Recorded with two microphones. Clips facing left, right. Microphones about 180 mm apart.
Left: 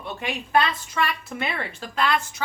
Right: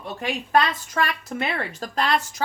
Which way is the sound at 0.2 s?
40° right (ahead or behind).